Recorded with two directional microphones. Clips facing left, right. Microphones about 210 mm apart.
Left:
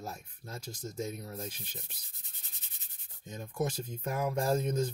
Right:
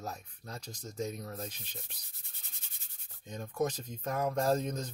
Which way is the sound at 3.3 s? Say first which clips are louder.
Right 1 dB; 10° left (ahead or behind).